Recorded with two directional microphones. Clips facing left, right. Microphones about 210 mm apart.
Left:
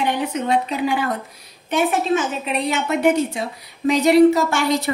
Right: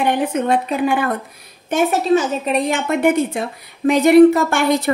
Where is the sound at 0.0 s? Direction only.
55° right (ahead or behind).